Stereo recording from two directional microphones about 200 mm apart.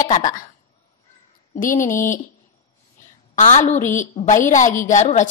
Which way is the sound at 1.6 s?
40° left (ahead or behind).